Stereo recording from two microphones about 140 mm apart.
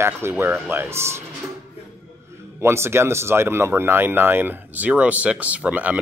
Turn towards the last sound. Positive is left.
turn(degrees=-10)  # may be behind; listen again after turning